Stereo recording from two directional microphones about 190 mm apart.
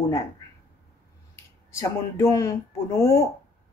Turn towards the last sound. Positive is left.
turn(degrees=15)  # may be behind; listen again after turning